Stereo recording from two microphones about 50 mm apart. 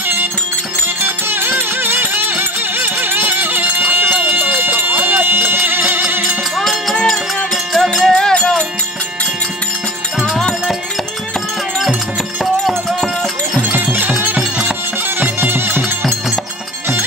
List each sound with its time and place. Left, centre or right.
1.0 s music: right
6.5 s music: centre
8.1 s music: centre
13.6 s music: right
15.1 s music: right